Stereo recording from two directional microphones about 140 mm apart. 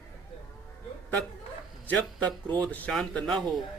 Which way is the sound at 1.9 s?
10° left (ahead or behind).